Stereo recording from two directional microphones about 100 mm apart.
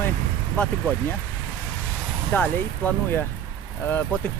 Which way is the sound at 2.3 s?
15° left (ahead or behind).